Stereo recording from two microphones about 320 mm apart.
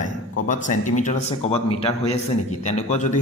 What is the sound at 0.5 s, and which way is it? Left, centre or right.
A man's voice, left.